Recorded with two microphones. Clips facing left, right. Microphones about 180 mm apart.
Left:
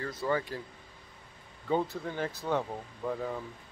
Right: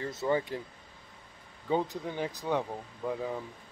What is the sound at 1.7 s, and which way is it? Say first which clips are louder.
Speech: even; 15° right (ahead or behind).